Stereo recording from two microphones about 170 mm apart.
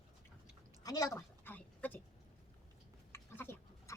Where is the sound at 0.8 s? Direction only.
20° left (ahead or behind).